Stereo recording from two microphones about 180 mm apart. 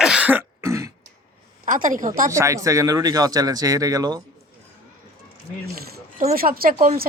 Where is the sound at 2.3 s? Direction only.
15° right (ahead or behind).